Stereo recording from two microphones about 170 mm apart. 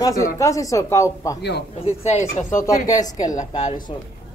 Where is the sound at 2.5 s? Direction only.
20° left (ahead or behind).